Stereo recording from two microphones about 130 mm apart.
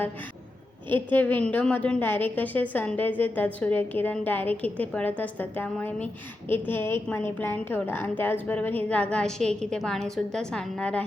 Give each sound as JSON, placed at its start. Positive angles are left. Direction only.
{"t": 0.9, "sound": "a woman's voice", "side_deg": 15}